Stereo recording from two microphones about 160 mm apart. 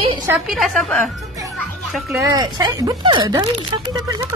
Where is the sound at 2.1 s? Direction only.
20° right (ahead or behind).